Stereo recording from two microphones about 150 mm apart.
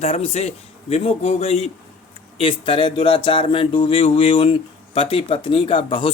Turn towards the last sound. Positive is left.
turn(degrees=35)  # may be behind; listen again after turning